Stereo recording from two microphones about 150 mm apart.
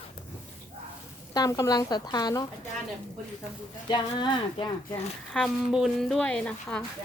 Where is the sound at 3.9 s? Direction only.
30° left (ahead or behind).